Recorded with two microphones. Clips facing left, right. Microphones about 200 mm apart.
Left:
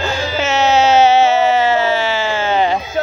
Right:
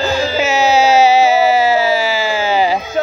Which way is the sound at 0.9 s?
35° right (ahead or behind).